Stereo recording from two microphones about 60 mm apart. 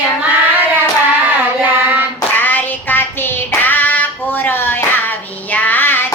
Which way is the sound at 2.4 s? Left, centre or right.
Left.